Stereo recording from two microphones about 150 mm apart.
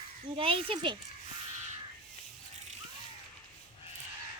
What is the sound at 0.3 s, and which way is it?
Speech, 35° right (ahead or behind).